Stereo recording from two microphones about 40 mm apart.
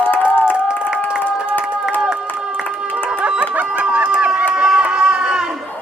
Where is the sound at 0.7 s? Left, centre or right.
Right.